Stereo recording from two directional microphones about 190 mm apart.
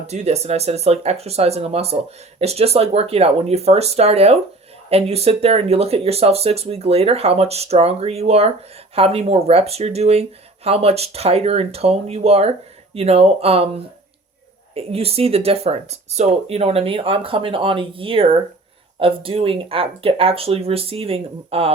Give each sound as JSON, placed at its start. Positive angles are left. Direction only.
{"t": 0.1, "sound": "speech", "side_deg": -35}